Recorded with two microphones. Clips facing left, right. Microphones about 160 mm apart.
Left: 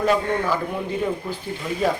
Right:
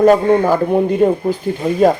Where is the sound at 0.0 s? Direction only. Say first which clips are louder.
Right 10 dB; 45° right (ahead or behind).